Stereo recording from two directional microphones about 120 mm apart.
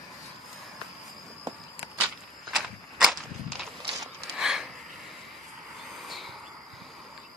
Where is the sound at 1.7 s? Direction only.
Centre (ahead or behind).